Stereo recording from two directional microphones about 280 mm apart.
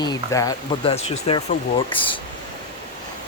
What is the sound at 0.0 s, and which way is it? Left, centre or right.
Speech, centre.